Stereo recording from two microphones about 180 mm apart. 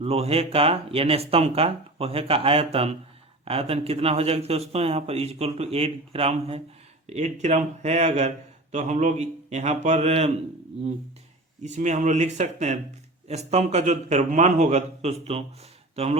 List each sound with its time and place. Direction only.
0.0 s a man's voice: 35° right (ahead or behind)
11.6 s a man's voice: 40° right (ahead or behind)